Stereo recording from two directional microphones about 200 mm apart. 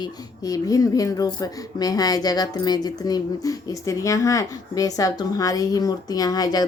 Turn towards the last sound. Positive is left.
turn(degrees=20)  # may be behind; listen again after turning